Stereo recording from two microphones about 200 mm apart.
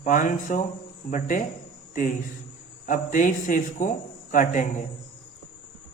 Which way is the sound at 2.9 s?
40° left (ahead or behind).